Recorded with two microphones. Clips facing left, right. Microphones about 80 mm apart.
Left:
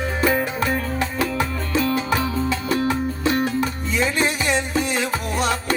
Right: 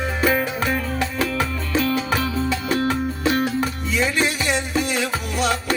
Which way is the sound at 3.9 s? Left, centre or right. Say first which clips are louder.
Even; left.